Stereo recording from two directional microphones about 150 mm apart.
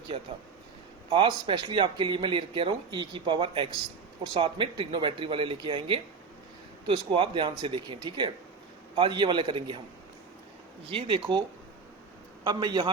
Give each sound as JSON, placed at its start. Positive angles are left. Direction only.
{"t": 1.1, "sound": "speech", "side_deg": -35}
{"t": 10.9, "sound": "speech", "side_deg": -30}
{"t": 12.5, "sound": "a man's voice", "side_deg": -30}